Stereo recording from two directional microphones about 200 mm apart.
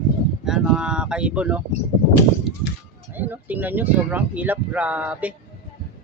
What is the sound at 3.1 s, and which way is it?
Speech, 10° right (ahead or behind).